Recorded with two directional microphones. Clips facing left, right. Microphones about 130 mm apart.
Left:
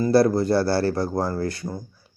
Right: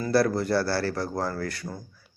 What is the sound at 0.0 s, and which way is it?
Speech, 25° left (ahead or behind).